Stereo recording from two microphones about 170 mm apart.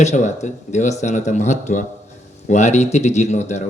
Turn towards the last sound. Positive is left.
turn(degrees=45)  # may be behind; listen again after turning